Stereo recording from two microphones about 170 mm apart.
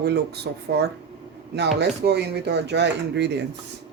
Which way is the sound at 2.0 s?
75° right (ahead or behind).